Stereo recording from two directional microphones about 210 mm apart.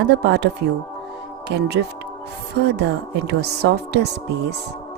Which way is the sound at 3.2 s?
55° right (ahead or behind).